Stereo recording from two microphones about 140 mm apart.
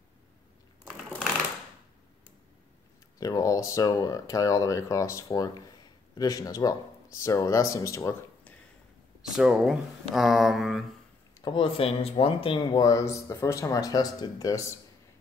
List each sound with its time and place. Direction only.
3.2 s speech: 25° left (ahead or behind)
9.2 s speech: 5° right (ahead or behind)
11.4 s speech: 35° left (ahead or behind); by 14.8 s 20° left (ahead or behind)